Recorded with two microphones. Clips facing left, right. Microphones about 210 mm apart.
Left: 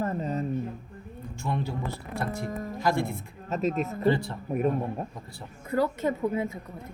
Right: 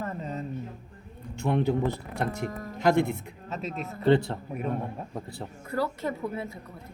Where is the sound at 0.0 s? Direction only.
40° left (ahead or behind).